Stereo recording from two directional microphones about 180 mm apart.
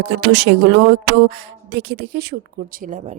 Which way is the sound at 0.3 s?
70° right (ahead or behind).